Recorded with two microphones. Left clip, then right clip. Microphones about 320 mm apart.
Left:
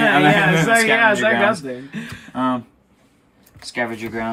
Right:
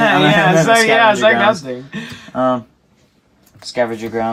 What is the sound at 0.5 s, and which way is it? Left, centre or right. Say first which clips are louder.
Speech: right 4 dB; centre.